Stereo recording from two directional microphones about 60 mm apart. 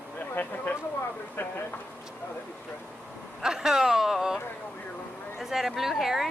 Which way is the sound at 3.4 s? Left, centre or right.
Centre.